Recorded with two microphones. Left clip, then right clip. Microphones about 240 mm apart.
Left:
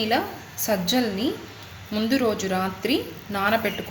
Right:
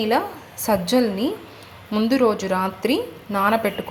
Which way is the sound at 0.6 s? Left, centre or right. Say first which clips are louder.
Right 4 dB; centre.